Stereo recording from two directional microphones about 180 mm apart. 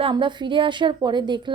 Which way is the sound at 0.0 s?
25° right (ahead or behind).